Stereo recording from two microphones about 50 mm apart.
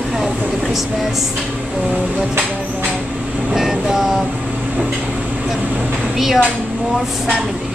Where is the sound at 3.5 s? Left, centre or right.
Centre.